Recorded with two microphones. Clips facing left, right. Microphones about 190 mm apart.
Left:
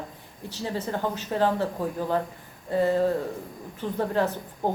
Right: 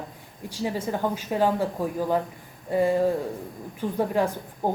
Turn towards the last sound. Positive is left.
turn(degrees=-10)  # may be behind; listen again after turning